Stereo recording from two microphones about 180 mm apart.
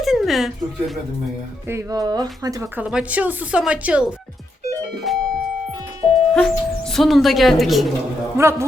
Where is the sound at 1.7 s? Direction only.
20° right (ahead or behind).